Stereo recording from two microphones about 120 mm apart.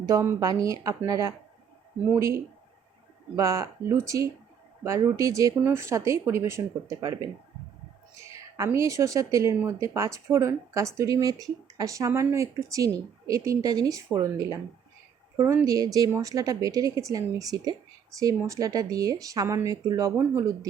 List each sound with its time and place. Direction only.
0.0 s speech: 25° right (ahead or behind)
3.3 s speech: 25° right (ahead or behind)
8.3 s speech: 25° right (ahead or behind)